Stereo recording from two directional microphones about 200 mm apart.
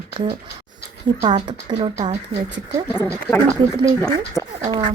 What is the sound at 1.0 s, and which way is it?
Speech, 25° right (ahead or behind).